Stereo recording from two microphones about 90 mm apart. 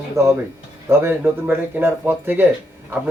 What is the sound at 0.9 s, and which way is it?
Speech, 25° right (ahead or behind).